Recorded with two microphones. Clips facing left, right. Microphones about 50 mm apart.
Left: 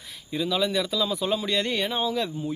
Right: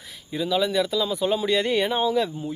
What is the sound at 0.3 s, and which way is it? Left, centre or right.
Speech, centre.